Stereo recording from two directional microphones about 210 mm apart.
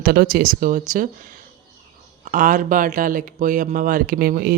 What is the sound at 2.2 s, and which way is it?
A woman's voice, 40° right (ahead or behind).